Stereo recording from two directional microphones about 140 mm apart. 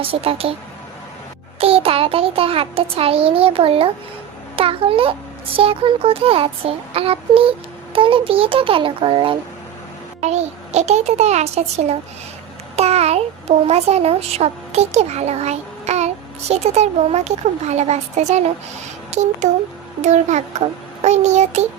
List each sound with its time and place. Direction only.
0.0 s a child's voice: 45° right (ahead or behind)
1.5 s a child's voice: 45° right (ahead or behind)
10.2 s a child's voice: 50° right (ahead or behind)